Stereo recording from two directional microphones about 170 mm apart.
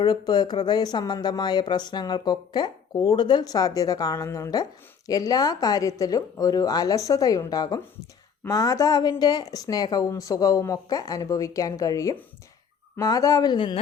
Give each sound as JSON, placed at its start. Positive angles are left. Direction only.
{"t": 0.0, "sound": "speech", "side_deg": 25}